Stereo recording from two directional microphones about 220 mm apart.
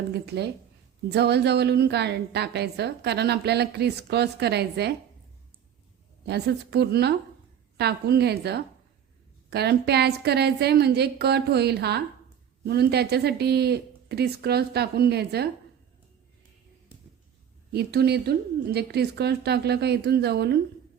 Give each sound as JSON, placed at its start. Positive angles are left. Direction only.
{"t": 0.1, "sound": "a woman's voice", "side_deg": -50}
{"t": 6.2, "sound": "a woman's voice", "side_deg": -50}
{"t": 17.7, "sound": "a woman's voice", "side_deg": -45}